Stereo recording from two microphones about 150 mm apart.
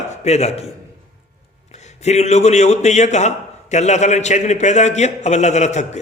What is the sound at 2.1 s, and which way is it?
A man's voice, 50° left (ahead or behind).